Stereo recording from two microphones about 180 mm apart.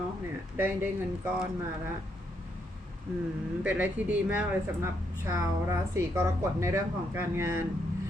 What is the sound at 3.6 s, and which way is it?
A woman's voice, 10° right (ahead or behind).